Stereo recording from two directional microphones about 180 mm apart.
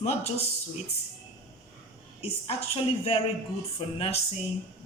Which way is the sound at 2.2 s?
35° left (ahead or behind).